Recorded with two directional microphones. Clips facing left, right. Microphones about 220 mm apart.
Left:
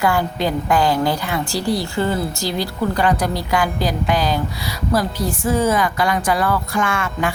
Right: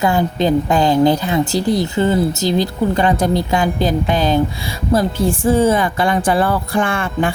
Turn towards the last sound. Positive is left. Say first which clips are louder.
# right 3 dB
turn(degrees=-30)  # may be behind; listen again after turning